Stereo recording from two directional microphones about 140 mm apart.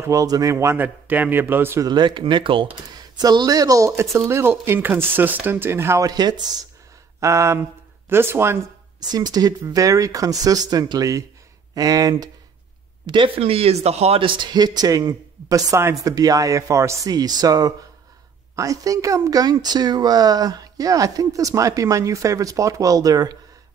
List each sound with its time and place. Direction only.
0.0 s speech: 25° right (ahead or behind)
1.9 s speech: 35° right (ahead or behind); by 8.5 s 15° right (ahead or behind)
9.0 s speech: 30° right (ahead or behind)